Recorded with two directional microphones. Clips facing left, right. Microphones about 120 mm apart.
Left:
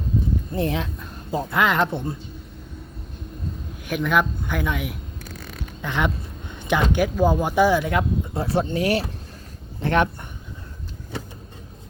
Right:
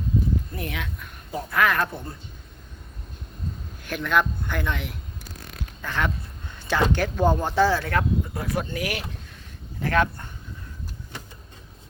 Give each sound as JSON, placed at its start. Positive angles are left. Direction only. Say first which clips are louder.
{"t": 0.5, "sound": "a woman's voice", "louder": "left 8 dB", "side_deg": 30}
{"t": 3.8, "sound": "speech", "louder": "left 2 dB", "side_deg": 10}
{"t": 6.5, "sound": "a sound", "louder": "left 2 dB", "side_deg": 15}
{"t": 6.9, "sound": "speech", "louder": "left 2 dB", "side_deg": 10}
{"t": 8.4, "sound": "a woman's voice", "louder": "left 6 dB", "side_deg": 30}